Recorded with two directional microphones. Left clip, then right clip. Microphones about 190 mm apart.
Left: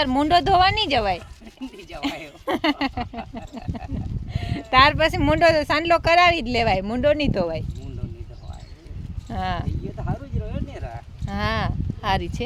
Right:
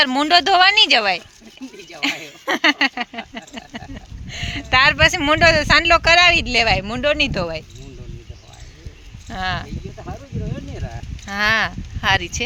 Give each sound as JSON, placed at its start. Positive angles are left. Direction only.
{"t": 0.0, "sound": "speech", "side_deg": 10}
{"t": 2.0, "sound": "a sound", "side_deg": 15}
{"t": 4.3, "sound": "speech", "side_deg": 10}
{"t": 9.3, "sound": "speech", "side_deg": 20}
{"t": 11.3, "sound": "speech", "side_deg": 10}